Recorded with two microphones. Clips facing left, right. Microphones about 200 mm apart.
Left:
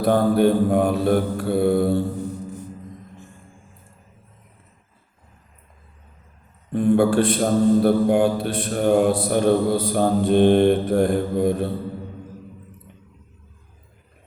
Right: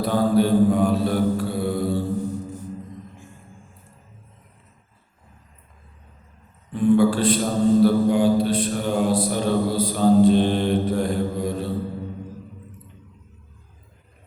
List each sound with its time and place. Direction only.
0.0 s a man's voice: 55° left (ahead or behind)
6.7 s a man's voice: 60° left (ahead or behind)